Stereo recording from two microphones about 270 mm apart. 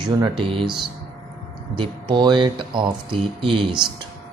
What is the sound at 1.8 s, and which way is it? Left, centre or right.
Speech, centre.